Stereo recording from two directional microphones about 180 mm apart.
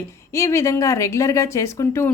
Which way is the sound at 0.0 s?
15° left (ahead or behind).